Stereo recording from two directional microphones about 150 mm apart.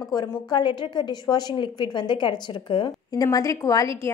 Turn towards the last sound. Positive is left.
turn(degrees=20)  # may be behind; listen again after turning